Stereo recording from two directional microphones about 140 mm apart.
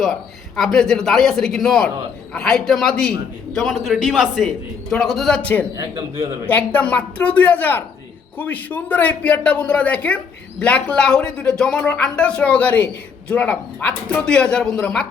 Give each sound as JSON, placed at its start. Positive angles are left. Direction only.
{"t": 0.0, "sound": "a man's voice", "side_deg": 0}
{"t": 5.7, "sound": "a man's voice", "side_deg": -25}
{"t": 6.5, "sound": "speech", "side_deg": 10}